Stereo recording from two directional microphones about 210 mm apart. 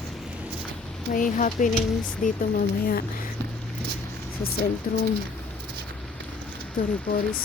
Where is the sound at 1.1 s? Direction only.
40° left (ahead or behind).